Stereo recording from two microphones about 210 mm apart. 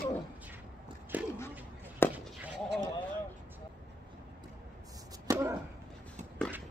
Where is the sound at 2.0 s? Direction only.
10° left (ahead or behind).